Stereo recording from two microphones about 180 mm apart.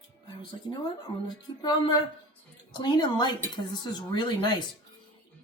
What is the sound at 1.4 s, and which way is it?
Speech, 25° left (ahead or behind).